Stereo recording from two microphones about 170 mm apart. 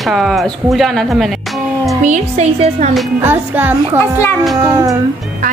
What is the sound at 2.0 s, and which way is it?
Speech, 45° right (ahead or behind).